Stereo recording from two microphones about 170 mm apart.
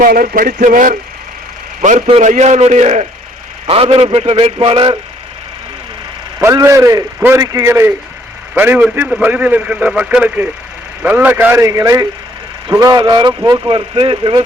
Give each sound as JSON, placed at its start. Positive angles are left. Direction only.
{"t": 0.0, "sound": "a sound", "side_deg": -55}
{"t": 1.8, "sound": "a man's voice", "side_deg": -45}
{"t": 6.4, "sound": "a man's voice", "side_deg": -20}